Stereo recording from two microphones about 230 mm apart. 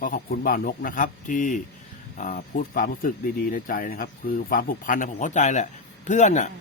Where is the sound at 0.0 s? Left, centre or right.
Left.